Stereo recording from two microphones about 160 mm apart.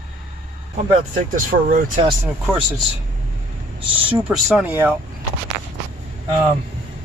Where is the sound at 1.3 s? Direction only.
60° right (ahead or behind).